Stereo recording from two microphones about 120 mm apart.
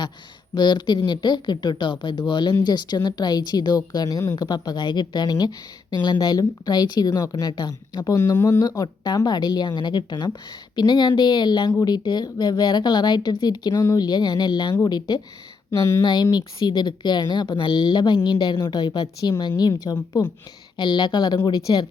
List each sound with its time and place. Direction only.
0.5 s a woman's voice: 40° left (ahead or behind)
20.7 s a woman's voice: 40° left (ahead or behind)